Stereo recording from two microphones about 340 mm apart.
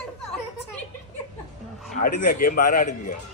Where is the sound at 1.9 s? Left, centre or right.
Left.